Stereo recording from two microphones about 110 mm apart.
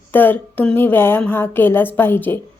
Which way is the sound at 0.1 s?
15° left (ahead or behind).